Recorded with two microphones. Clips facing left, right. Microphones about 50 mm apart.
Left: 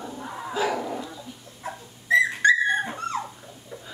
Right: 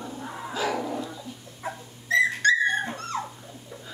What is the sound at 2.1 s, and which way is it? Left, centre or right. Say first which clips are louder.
Dog: left 2 dB; centre.